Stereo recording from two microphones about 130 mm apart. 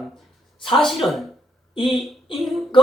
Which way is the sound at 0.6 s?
40° left (ahead or behind).